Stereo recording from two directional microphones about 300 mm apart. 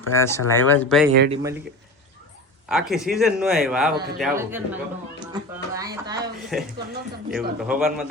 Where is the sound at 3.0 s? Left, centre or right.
Centre.